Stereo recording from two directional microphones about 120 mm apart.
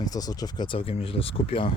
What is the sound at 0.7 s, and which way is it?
Speech, 55° left (ahead or behind).